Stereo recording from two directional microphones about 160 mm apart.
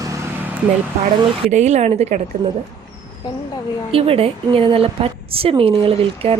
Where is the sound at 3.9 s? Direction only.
35° right (ahead or behind).